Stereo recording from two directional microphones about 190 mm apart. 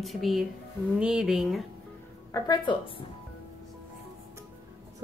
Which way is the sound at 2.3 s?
20° left (ahead or behind).